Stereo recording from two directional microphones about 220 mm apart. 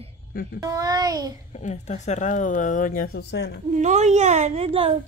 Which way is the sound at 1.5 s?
30° left (ahead or behind).